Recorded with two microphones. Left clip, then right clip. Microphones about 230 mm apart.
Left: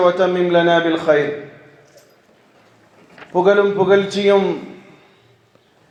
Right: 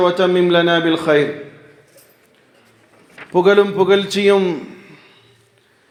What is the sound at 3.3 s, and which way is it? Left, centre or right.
A man's voice, right.